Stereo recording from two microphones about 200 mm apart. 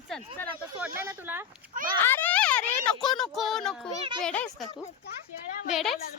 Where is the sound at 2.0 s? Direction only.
10° left (ahead or behind).